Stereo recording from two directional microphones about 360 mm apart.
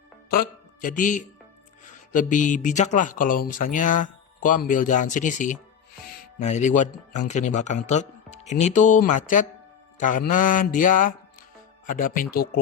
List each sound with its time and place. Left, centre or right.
0.3 s speech: left